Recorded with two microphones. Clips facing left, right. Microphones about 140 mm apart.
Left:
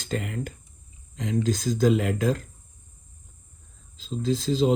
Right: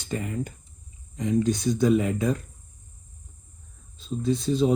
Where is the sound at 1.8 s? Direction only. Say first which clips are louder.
Left 1 dB; 90° left.